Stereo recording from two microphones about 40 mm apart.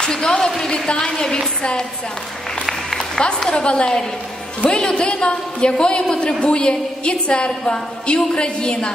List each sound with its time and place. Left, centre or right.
0.0 s speech: centre
0.9 s a woman's voice: left
3.2 s a woman's voice: left